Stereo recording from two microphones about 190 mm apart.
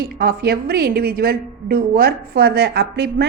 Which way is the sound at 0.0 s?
50° right (ahead or behind).